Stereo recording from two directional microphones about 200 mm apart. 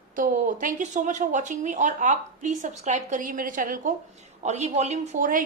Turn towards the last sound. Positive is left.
turn(degrees=-40)  # may be behind; listen again after turning